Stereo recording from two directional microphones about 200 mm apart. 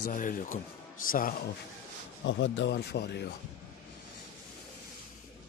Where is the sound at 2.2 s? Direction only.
65° left (ahead or behind).